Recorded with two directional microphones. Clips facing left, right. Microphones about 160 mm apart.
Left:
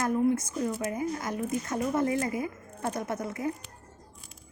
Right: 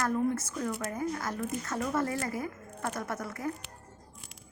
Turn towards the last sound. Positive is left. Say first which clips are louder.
# left 3 dB
turn(degrees=20)  # may be behind; listen again after turning